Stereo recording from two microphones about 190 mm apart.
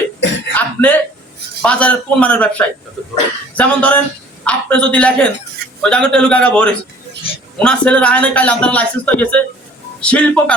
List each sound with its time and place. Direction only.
0.2 s throat clearing: 70° left (ahead or behind)
0.5 s throat clearing: 10° left (ahead or behind)
1.6 s a man's voice: 5° left (ahead or behind)